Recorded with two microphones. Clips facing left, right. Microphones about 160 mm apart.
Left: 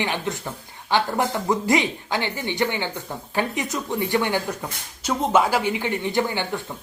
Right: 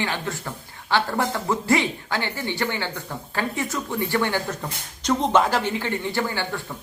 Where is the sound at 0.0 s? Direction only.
20° left (ahead or behind).